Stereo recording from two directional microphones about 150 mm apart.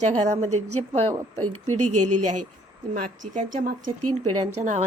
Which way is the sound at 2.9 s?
65° right (ahead or behind).